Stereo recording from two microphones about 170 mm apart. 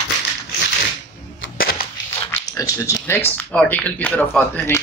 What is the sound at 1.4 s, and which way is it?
Cap gun, 60° left (ahead or behind).